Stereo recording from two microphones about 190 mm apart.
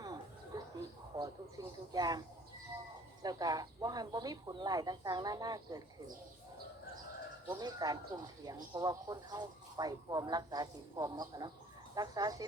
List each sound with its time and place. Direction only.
0.0 s a sound: 20° right (ahead or behind)
1.1 s speech: 20° right (ahead or behind)
3.2 s speech: 20° right (ahead or behind)
7.4 s speech: 20° right (ahead or behind)